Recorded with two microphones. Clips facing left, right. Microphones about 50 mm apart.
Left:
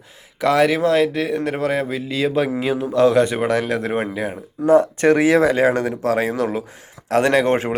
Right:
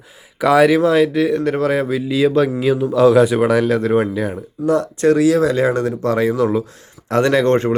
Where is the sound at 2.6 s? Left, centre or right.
Centre.